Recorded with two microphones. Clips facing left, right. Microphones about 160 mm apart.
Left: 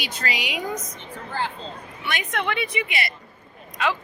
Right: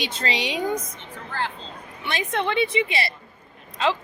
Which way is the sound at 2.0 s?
30° right (ahead or behind).